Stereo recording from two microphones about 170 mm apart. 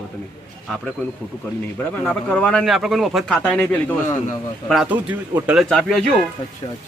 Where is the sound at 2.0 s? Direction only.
5° left (ahead or behind).